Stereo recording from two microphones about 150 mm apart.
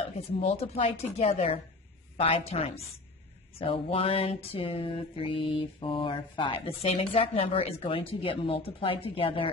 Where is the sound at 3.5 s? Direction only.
35° left (ahead or behind).